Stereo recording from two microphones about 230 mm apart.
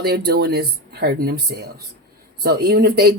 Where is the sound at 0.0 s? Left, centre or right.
Right.